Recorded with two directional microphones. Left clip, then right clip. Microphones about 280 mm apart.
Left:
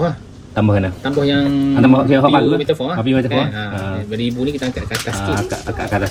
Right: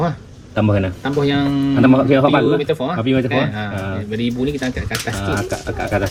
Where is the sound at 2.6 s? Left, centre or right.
Right.